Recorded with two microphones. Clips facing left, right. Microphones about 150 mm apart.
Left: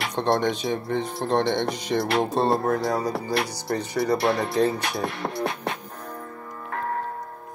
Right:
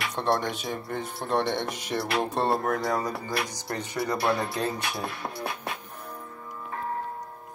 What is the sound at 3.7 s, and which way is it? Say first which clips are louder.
Speech: left 7 dB; 10° left (ahead or behind).